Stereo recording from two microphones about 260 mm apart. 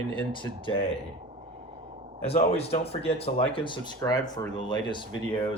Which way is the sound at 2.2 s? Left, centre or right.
Left.